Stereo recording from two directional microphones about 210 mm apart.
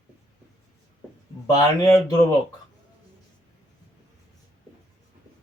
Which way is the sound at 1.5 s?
20° left (ahead or behind).